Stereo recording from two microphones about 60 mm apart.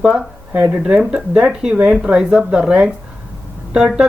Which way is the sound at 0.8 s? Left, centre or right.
Centre.